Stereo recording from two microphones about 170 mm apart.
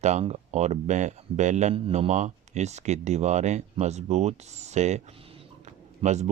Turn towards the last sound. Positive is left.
turn(degrees=-40)  # may be behind; listen again after turning